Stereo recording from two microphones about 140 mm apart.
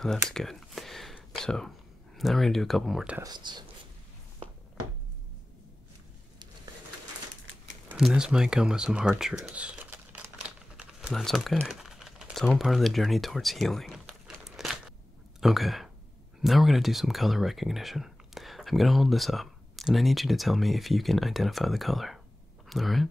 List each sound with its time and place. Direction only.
0.3 s a sound: 5° left (ahead or behind)
2.1 s speech: centre (ahead or behind)
3.2 s speech: 30° right (ahead or behind)
7.9 s a sound: 5° right (ahead or behind)
11.2 s crumpling: centre (ahead or behind)
15.4 s speech: centre (ahead or behind)